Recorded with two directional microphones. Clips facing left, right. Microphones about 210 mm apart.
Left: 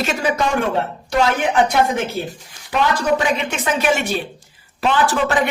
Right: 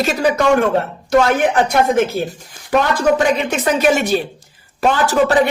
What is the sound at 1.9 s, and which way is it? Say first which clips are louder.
A woman's voice: right 6 dB; 45° right (ahead or behind).